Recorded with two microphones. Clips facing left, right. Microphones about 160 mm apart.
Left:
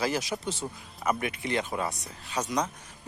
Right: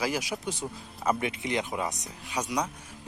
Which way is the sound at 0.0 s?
10° right (ahead or behind).